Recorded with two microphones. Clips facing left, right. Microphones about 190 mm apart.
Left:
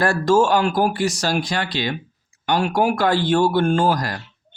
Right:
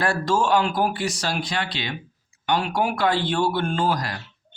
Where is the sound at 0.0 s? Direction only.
45° left (ahead or behind).